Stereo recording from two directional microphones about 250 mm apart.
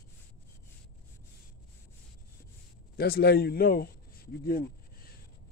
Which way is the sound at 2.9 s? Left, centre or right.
Left.